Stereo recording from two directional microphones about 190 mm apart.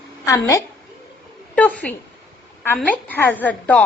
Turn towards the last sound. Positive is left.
turn(degrees=10)  # may be behind; listen again after turning